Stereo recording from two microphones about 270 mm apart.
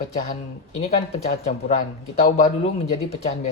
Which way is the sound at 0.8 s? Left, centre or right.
Left.